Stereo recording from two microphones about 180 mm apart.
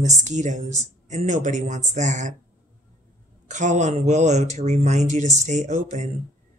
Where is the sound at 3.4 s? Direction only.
40° right (ahead or behind).